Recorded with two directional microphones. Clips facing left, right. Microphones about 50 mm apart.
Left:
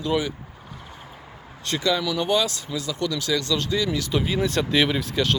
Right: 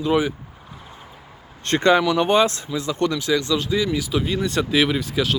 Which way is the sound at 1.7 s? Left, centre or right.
Right.